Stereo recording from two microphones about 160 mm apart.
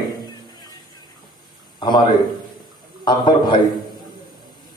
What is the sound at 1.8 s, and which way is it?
A man's voice, 30° left (ahead or behind).